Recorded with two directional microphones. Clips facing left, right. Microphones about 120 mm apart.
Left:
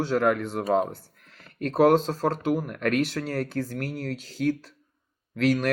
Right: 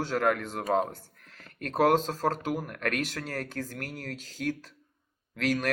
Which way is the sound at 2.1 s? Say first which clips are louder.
Left 4 dB; 45° right (ahead or behind).